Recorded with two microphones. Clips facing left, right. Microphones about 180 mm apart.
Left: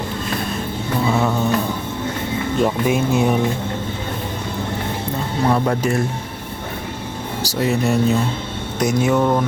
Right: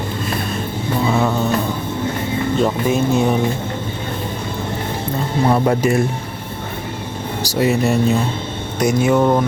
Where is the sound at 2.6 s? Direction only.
10° left (ahead or behind).